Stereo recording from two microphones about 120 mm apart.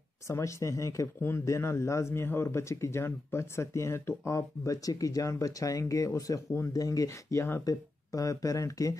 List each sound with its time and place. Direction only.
0.3 s a man's voice: 25° left (ahead or behind)